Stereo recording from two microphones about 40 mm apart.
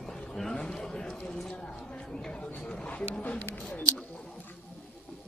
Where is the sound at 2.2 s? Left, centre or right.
Left.